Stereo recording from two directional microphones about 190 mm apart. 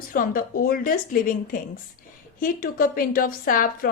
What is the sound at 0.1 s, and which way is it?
Speech, 50° left (ahead or behind).